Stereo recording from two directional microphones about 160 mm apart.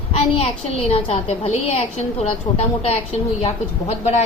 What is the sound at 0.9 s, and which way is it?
A woman's voice, 35° left (ahead or behind).